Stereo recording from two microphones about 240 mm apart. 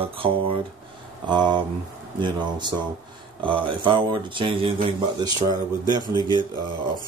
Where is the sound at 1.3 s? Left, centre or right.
Centre.